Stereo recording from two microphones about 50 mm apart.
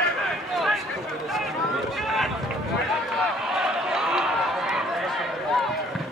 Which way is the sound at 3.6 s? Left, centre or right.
Centre.